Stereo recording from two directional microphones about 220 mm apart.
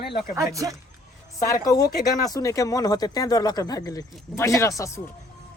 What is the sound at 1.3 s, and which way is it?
Speech, 15° left (ahead or behind).